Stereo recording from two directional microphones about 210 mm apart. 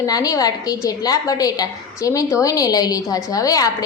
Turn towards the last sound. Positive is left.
turn(degrees=15)  # may be behind; listen again after turning